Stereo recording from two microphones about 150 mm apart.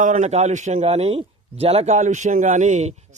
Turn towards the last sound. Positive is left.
turn(degrees=-50)  # may be behind; listen again after turning